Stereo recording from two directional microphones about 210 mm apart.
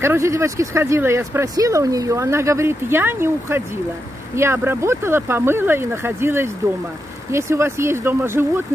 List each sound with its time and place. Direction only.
0.0 s speech: 15° right (ahead or behind)